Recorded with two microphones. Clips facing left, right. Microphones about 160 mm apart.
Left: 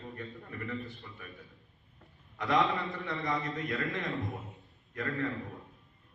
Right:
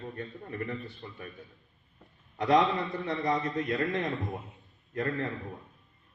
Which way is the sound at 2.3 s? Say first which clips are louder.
Right 4 dB; 35° right (ahead or behind).